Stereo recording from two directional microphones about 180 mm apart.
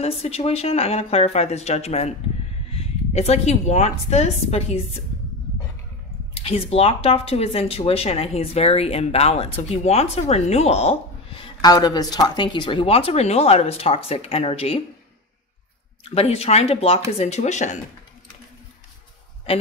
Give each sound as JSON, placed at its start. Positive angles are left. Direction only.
{"t": 0.0, "sound": "speech", "side_deg": 35}
{"t": 6.3, "sound": "speech", "side_deg": 35}
{"t": 16.0, "sound": "speech", "side_deg": 35}
{"t": 19.5, "sound": "a man's voice", "side_deg": 30}